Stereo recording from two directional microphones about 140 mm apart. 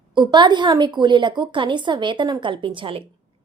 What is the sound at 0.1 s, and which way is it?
A woman's voice, 35° right (ahead or behind).